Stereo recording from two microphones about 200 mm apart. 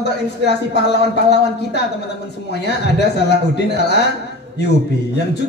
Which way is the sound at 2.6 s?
55° left (ahead or behind).